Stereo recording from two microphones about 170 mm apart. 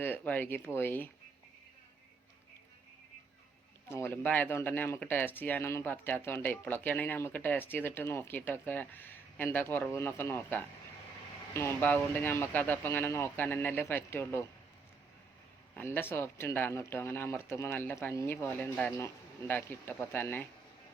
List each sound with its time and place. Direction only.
0.0 s speech: 10° left (ahead or behind)
3.8 s speech: 15° left (ahead or behind)
15.7 s speech: 15° left (ahead or behind)